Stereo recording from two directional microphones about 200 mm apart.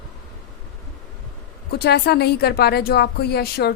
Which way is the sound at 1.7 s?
55° left (ahead or behind).